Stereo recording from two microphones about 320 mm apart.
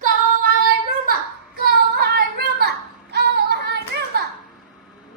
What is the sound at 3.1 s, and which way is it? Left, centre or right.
Music, right.